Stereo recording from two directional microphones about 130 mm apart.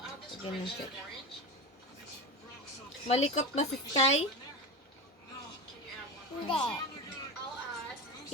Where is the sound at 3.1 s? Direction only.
60° left (ahead or behind).